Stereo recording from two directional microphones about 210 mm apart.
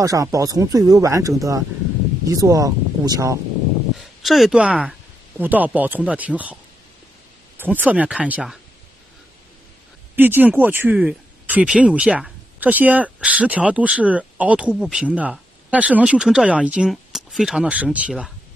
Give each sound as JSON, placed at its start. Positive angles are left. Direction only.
{"t": 0.0, "sound": "speech", "side_deg": -15}
{"t": 3.9, "sound": "speech", "side_deg": 0}
{"t": 10.1, "sound": "speech", "side_deg": -10}